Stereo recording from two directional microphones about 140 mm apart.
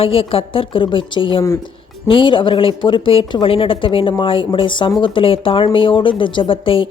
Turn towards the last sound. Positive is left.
turn(degrees=40)  # may be behind; listen again after turning